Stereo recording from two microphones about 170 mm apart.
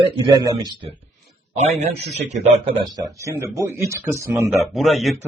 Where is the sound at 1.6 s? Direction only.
40° right (ahead or behind).